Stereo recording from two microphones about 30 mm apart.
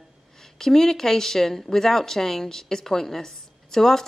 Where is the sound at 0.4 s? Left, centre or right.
Centre.